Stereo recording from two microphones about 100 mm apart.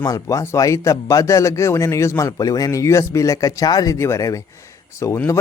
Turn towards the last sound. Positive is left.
turn(degrees=30)  # may be behind; listen again after turning